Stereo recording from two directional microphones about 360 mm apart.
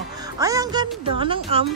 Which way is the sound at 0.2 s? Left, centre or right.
Centre.